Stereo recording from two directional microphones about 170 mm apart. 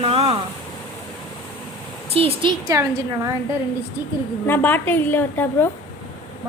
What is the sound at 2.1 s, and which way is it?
Speech, 35° right (ahead or behind).